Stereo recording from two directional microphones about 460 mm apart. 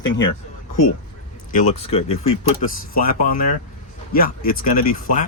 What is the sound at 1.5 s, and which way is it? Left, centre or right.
Speech, centre.